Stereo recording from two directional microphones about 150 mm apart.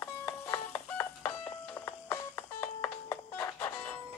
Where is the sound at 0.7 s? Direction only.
10° left (ahead or behind).